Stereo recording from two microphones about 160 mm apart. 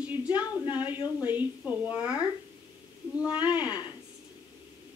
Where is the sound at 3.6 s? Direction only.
10° right (ahead or behind).